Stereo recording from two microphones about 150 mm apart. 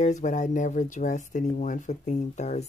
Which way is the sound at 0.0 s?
55° left (ahead or behind).